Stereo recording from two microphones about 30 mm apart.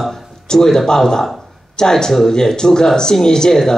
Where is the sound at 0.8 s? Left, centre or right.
Centre.